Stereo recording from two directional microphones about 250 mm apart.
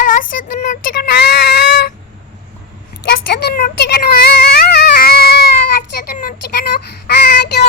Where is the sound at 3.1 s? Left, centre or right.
Left.